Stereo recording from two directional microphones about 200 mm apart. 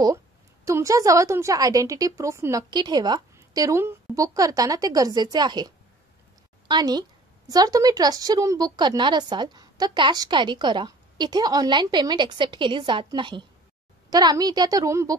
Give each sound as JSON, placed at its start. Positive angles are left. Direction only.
{"t": 0.7, "sound": "a woman's voice", "side_deg": -15}
{"t": 6.7, "sound": "a woman's voice", "side_deg": -20}